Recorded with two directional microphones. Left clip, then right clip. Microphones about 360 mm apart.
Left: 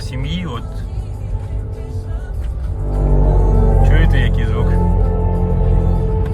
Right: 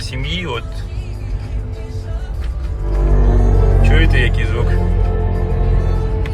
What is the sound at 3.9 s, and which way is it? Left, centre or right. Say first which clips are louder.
Speech: right 3 dB; centre.